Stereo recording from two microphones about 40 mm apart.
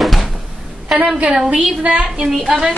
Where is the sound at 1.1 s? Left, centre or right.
Centre.